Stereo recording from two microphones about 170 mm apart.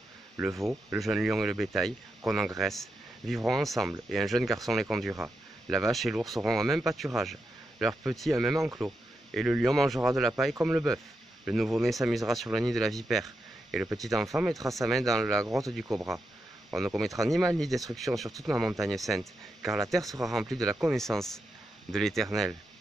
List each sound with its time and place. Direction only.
0.5 s speech: 15° right (ahead or behind)
0.9 s speech: centre (ahead or behind)